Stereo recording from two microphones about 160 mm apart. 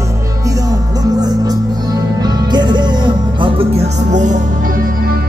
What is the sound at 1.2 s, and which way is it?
Music, 25° right (ahead or behind).